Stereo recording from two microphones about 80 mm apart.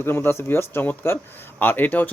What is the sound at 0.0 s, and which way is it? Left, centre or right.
Speech, left.